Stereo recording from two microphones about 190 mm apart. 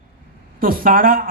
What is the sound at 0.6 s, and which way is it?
Speech, 50° right (ahead or behind).